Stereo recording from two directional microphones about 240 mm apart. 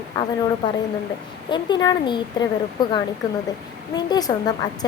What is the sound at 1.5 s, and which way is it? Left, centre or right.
Speech, centre.